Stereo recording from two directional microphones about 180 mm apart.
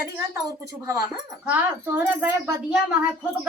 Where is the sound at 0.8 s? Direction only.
20° right (ahead or behind).